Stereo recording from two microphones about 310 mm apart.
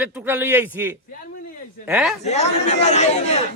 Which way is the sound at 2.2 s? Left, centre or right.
Left.